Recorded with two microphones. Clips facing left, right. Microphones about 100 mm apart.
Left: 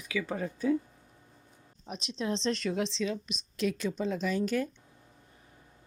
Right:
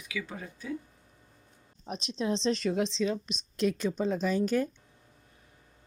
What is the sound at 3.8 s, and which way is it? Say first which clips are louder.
Speech: right 2 dB; 25° right (ahead or behind).